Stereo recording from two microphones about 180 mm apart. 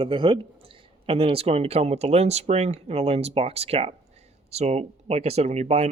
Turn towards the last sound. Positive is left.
turn(degrees=-35)  # may be behind; listen again after turning